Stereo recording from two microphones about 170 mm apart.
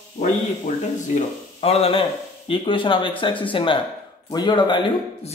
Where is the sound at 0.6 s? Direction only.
45° left (ahead or behind).